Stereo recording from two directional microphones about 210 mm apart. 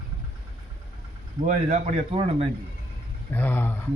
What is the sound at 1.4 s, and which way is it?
A man's voice, 35° right (ahead or behind).